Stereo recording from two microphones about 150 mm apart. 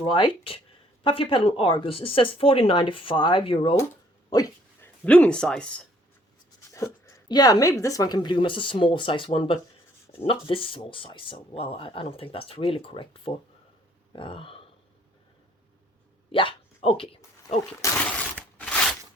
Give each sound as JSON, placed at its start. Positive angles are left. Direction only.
{"t": 0.0, "sound": "speech", "side_deg": 35}
{"t": 4.3, "sound": "a sound", "side_deg": 25}
{"t": 5.0, "sound": "speech", "side_deg": 10}
{"t": 6.7, "sound": "speech", "side_deg": 20}
{"t": 16.3, "sound": "hiccup", "side_deg": 35}
{"t": 17.8, "sound": "speech", "side_deg": 20}
{"t": 18.6, "sound": "a sound", "side_deg": 5}